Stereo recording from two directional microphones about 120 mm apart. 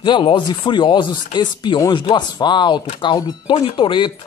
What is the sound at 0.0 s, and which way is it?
Speech, 40° left (ahead or behind).